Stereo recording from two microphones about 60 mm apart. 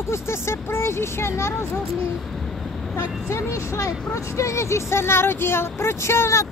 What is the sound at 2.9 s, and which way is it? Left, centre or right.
Speech, left.